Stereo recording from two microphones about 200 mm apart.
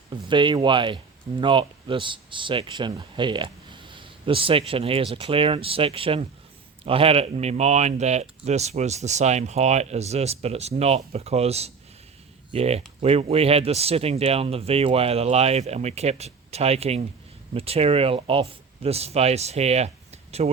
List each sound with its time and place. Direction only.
0.3 s speech: 25° right (ahead or behind)